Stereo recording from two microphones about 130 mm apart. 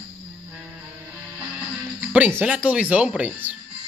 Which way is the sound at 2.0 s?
10° right (ahead or behind).